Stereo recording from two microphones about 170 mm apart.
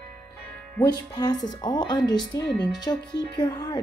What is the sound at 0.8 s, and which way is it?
A woman's voice, 25° left (ahead or behind).